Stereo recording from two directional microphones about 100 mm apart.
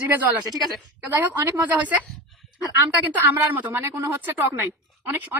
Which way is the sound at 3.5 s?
20° right (ahead or behind).